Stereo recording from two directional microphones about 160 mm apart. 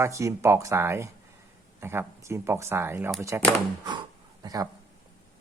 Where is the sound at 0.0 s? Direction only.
20° right (ahead or behind).